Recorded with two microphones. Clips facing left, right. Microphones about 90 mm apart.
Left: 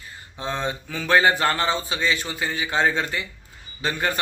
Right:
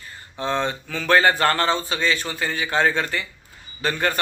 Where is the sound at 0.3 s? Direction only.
15° left (ahead or behind).